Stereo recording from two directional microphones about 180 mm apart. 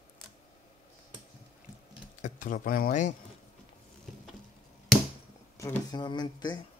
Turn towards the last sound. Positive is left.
turn(degrees=25)  # may be behind; listen again after turning